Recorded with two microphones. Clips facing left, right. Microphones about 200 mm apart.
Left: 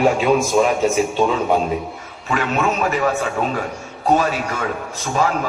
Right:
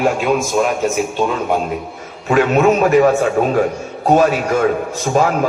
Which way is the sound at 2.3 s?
50° right (ahead or behind).